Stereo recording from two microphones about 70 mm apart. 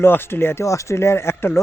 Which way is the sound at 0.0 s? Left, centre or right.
Left.